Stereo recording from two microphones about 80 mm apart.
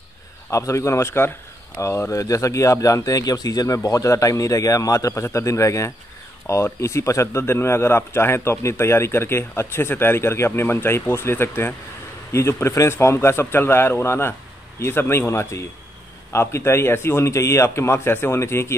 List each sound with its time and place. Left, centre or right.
0.5 s speech: left